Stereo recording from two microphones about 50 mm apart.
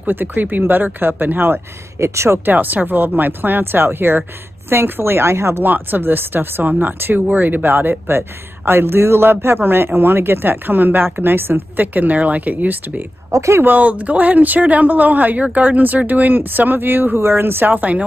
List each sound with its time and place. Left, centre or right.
0.0 s speech: right
2.0 s speech: right
2.4 s a man's voice: right
5.6 s speech: right
8.2 s a man's voice: right